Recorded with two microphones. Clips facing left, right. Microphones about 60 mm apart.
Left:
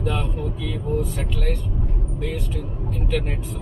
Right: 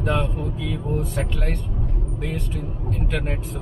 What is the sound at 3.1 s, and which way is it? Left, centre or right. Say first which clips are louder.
Speech: left 3 dB; centre.